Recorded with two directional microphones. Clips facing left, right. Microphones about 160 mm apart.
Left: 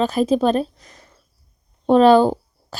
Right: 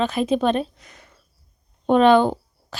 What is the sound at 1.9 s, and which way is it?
Speech, 35° left (ahead or behind).